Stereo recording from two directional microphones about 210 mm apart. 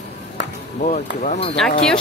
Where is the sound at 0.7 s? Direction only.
35° left (ahead or behind).